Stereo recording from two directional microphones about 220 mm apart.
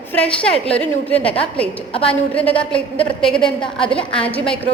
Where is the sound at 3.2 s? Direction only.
5° left (ahead or behind).